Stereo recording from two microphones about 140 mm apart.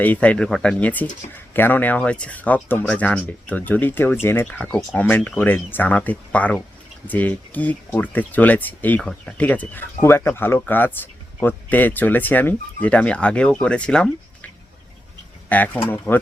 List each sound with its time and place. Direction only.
0.0 s speech: 10° left (ahead or behind)